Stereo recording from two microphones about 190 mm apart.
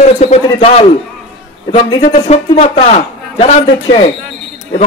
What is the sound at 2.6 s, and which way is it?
Speech, 35° left (ahead or behind).